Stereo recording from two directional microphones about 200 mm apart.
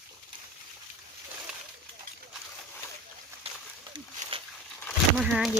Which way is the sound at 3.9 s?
25° right (ahead or behind).